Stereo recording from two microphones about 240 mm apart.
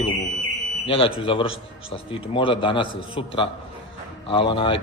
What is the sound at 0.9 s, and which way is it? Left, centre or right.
A man's voice, left.